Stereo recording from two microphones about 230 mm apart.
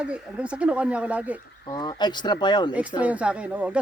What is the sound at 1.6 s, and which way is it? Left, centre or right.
Speech, centre.